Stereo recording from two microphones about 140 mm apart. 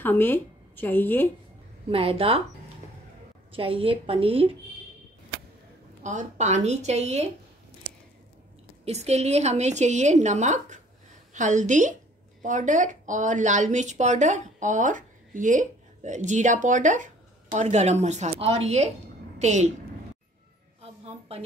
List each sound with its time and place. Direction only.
0.0 s a woman's voice: 15° left (ahead or behind)
1.9 s a woman's voice: 45° right (ahead or behind)
3.5 s a woman's voice: 40° right (ahead or behind)
6.0 s a woman's voice: 60° right (ahead or behind)
8.8 s a woman's voice: 50° right (ahead or behind)
20.8 s a sound: 45° right (ahead or behind)